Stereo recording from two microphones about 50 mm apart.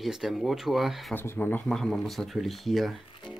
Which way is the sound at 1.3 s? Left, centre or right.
Left.